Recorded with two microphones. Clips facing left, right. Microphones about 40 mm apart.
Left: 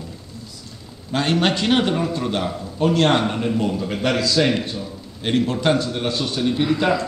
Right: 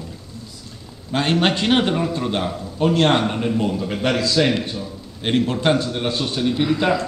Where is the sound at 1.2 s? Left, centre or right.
Centre.